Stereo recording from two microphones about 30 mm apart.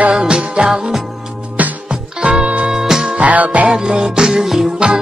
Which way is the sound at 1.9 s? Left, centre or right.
Right.